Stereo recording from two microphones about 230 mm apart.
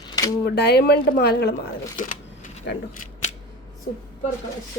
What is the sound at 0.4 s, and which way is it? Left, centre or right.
Speech, left.